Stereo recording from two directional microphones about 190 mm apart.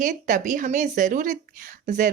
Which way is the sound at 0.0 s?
40° right (ahead or behind).